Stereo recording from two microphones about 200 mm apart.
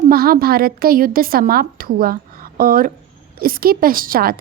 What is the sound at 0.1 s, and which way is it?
A woman's voice, 50° right (ahead or behind).